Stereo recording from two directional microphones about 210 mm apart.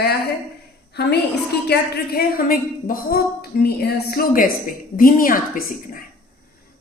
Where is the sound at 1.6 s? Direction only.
50° left (ahead or behind).